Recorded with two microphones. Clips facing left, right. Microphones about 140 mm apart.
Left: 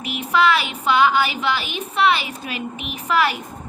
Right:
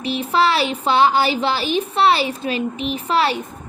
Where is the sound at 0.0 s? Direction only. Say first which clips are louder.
Right 1 dB; 30° right (ahead or behind).